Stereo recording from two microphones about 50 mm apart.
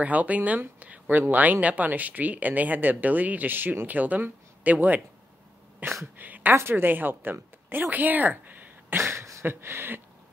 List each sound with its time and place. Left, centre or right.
0.0 s a woman's voice: right
6.5 s speech: right
9.0 s a sound: right
9.4 s speech: right